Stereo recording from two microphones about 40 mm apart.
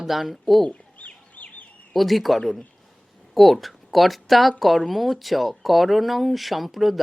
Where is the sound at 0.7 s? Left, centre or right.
Left.